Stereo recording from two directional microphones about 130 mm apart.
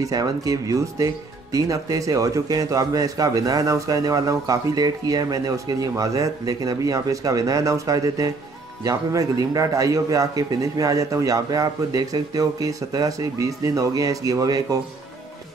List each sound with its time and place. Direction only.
0.0 s speech: 30° right (ahead or behind)